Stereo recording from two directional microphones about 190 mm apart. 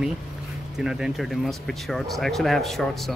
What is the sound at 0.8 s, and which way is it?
Speech, 5° right (ahead or behind).